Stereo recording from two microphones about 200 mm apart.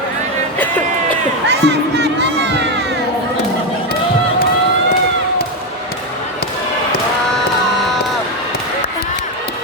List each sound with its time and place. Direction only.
1.5 s crowd: 55° right (ahead or behind)